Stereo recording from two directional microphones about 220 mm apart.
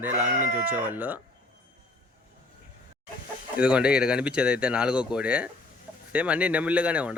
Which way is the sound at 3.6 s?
5° right (ahead or behind).